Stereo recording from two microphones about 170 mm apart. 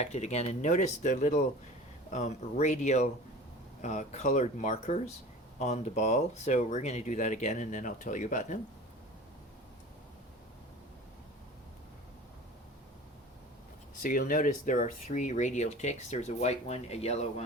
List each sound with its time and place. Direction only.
0.0 s speech: 40° left (ahead or behind)
14.0 s speech: 55° left (ahead or behind); by 17.4 s 40° left (ahead or behind)